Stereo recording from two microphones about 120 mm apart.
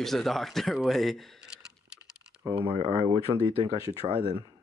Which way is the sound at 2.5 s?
50° right (ahead or behind).